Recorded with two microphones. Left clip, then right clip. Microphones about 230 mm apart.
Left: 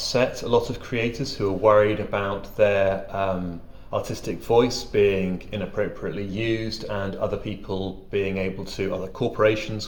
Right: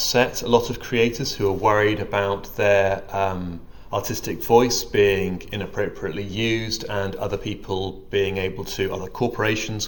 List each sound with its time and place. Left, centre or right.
0.0 s speech: right